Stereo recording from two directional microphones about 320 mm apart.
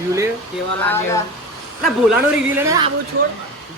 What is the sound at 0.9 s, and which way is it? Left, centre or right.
Speech, centre.